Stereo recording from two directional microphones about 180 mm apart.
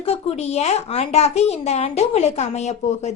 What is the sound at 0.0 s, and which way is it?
A woman's voice, 35° left (ahead or behind).